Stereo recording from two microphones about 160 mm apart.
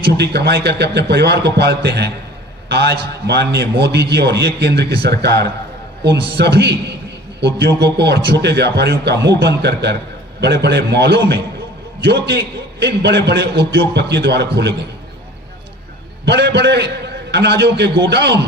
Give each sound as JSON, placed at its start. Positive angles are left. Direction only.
{"t": 0.1, "sound": "a man's voice", "side_deg": -90}
{"t": 16.2, "sound": "a man's voice", "side_deg": -90}